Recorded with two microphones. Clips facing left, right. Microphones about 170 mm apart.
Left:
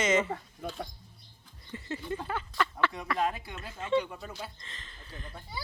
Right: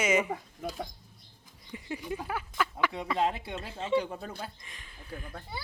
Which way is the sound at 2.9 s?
25° right (ahead or behind).